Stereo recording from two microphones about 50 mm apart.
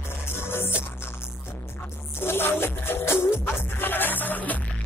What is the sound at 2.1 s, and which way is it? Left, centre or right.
Music, left.